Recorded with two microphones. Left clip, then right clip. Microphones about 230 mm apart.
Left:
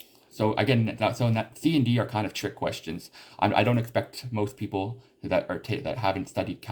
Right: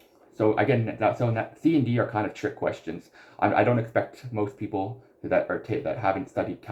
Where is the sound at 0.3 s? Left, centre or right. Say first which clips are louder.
Right 2 dB; left.